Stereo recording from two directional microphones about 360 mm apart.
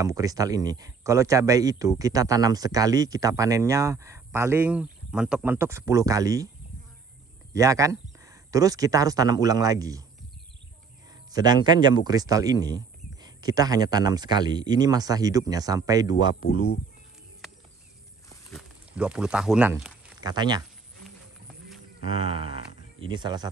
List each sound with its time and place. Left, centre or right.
0.0 s speech: centre
7.5 s speech: centre
11.3 s speech: centre
16.4 s speech: left
18.5 s speech: centre
23.0 s speech: centre